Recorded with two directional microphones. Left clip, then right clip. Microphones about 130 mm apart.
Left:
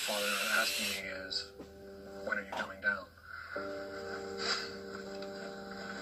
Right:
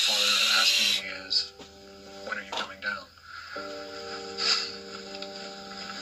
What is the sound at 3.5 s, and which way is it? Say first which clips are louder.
Music: right 3 dB; 50° left (ahead or behind).